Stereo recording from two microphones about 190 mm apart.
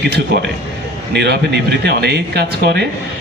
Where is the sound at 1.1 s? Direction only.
60° right (ahead or behind).